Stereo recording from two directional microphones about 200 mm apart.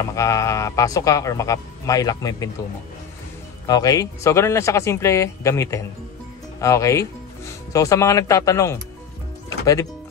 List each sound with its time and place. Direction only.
0.0 s speech: 15° left (ahead or behind)
3.6 s speech: 20° left (ahead or behind)